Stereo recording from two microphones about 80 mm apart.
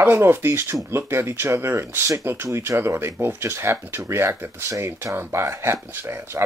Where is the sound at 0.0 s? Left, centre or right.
Right.